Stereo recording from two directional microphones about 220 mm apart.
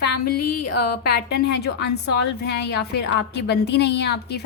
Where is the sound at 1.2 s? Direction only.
50° left (ahead or behind).